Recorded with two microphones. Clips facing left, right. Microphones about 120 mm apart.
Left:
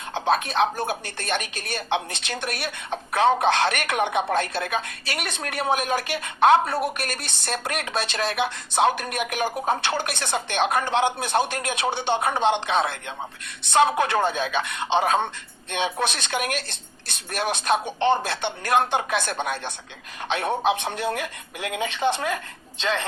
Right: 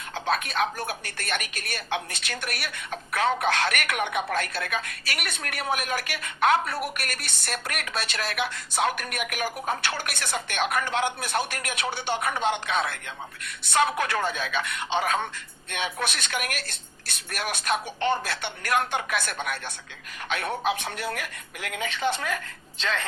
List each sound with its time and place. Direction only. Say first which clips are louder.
0.1 s a woman's voice: left 5 dB; 25° left (ahead or behind)